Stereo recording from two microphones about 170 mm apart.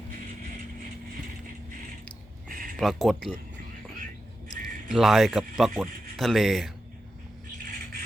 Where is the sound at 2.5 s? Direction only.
55° right (ahead or behind).